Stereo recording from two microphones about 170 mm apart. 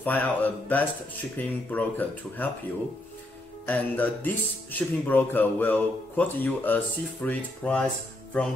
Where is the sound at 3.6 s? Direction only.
10° left (ahead or behind).